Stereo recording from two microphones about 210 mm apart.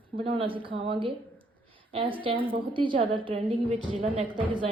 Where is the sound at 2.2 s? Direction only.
25° right (ahead or behind).